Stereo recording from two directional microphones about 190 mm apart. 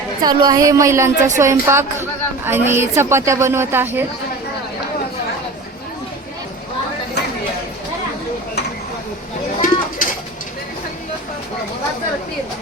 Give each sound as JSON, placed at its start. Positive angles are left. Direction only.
{"t": 0.2, "sound": "a woman's voice", "side_deg": -20}
{"t": 9.6, "sound": "bird", "side_deg": 45}